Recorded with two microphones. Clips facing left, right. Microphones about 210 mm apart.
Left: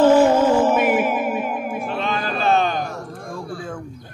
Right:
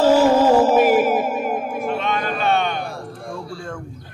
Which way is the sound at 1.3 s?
40° right (ahead or behind).